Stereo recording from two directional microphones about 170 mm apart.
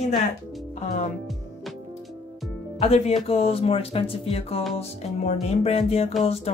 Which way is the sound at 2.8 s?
35° left (ahead or behind).